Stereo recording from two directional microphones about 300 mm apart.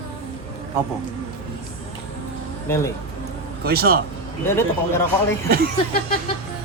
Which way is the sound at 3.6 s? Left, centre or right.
Right.